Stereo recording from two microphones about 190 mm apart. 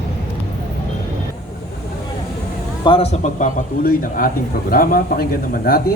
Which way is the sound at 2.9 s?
30° left (ahead or behind).